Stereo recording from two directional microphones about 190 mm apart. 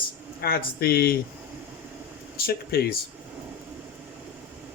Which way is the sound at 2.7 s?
55° left (ahead or behind).